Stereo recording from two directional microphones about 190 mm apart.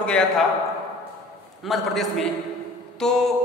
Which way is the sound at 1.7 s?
Centre (ahead or behind).